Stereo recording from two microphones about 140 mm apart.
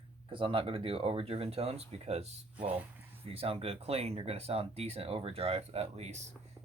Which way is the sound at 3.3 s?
45° right (ahead or behind).